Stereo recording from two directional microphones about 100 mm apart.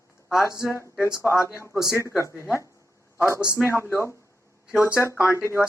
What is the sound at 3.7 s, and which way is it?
Speech, 25° left (ahead or behind).